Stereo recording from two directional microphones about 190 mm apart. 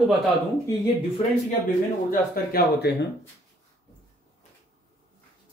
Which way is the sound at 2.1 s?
55° left (ahead or behind).